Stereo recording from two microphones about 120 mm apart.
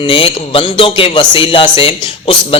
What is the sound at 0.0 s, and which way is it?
A man's voice, 45° left (ahead or behind).